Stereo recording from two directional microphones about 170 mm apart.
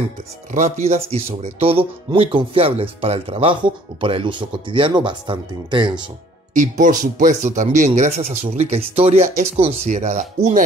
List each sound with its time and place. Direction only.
0.5 s speech: 45° right (ahead or behind); by 6.0 s 25° right (ahead or behind)
6.5 s speech: 50° right (ahead or behind)